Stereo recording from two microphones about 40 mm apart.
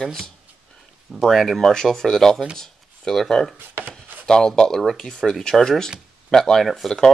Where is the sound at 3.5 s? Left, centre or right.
Right.